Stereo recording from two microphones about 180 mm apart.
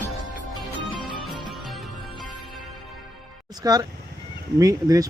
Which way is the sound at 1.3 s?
Centre (ahead or behind).